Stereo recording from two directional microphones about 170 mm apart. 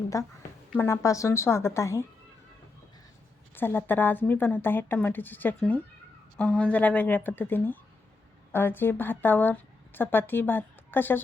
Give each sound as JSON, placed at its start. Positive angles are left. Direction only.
{"t": 0.1, "sound": "a woman's voice", "side_deg": 20}
{"t": 3.5, "sound": "a woman's voice", "side_deg": 10}